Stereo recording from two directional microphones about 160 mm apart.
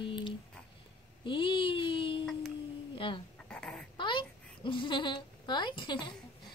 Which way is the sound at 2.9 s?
30° left (ahead or behind).